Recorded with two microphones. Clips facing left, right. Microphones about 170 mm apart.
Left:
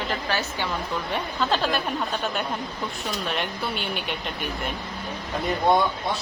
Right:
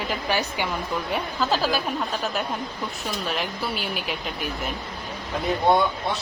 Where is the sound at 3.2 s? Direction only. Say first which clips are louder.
Right 1 dB; centre (ahead or behind).